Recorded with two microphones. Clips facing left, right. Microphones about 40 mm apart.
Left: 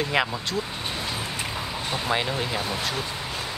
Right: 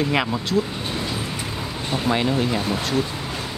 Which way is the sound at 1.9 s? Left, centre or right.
Centre.